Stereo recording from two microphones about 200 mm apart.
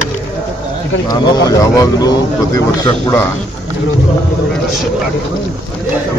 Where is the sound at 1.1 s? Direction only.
20° left (ahead or behind).